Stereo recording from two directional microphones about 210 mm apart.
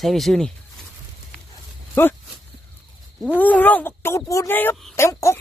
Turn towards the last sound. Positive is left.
turn(degrees=15)  # may be behind; listen again after turning